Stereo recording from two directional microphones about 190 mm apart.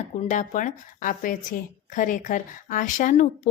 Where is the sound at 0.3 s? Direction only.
40° left (ahead or behind).